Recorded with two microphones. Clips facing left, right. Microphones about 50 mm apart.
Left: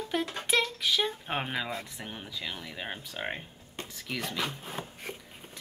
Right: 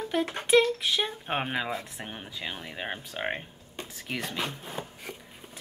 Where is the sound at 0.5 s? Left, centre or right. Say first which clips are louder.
Right 6 dB; centre.